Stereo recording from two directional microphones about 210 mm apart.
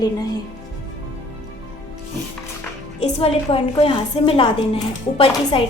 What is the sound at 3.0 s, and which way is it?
A woman's voice, 30° left (ahead or behind).